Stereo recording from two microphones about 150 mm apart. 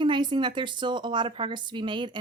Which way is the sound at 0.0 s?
30° right (ahead or behind).